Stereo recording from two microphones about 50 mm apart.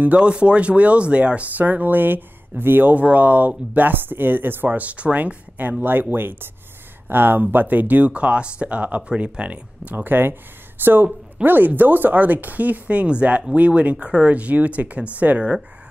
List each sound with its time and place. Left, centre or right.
0.2 s speech: right
4.7 s speech: right
9.9 s speech: right